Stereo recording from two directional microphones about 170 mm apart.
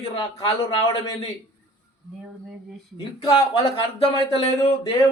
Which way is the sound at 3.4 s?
20° left (ahead or behind).